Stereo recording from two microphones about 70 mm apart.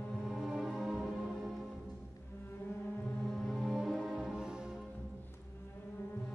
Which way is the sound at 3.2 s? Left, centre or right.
Centre.